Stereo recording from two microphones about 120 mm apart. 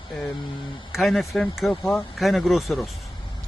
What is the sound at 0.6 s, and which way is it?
Speech, 45° left (ahead or behind).